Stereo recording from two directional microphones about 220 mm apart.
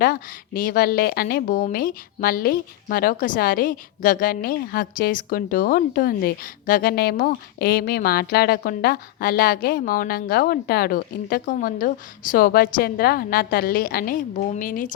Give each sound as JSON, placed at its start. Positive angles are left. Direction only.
{"t": 0.0, "sound": "a woman's voice", "side_deg": 40}